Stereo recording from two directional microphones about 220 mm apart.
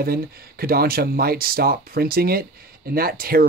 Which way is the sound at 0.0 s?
45° right (ahead or behind).